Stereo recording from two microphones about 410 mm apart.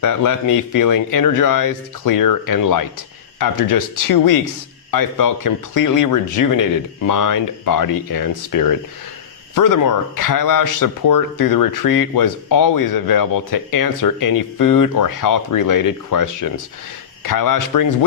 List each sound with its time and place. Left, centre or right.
0.0 s speech: left